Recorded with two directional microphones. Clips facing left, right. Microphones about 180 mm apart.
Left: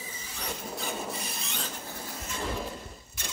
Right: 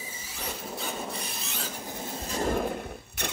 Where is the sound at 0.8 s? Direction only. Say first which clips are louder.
Right 1 dB; centre (ahead or behind).